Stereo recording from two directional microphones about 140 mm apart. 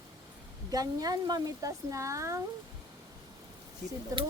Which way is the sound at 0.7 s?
25° right (ahead or behind).